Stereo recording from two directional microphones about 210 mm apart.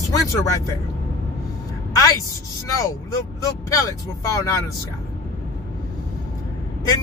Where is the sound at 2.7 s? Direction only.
15° left (ahead or behind).